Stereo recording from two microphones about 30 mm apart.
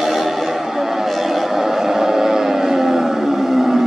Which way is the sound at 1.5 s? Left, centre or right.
Centre.